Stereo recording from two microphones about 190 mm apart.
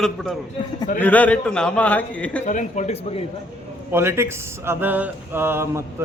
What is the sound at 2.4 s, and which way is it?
Speech, 40° left (ahead or behind).